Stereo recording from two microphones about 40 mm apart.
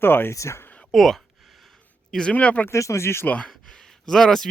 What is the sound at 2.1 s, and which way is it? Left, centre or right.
Speech, centre.